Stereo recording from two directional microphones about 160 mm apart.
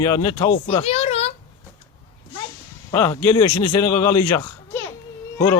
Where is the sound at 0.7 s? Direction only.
40° left (ahead or behind).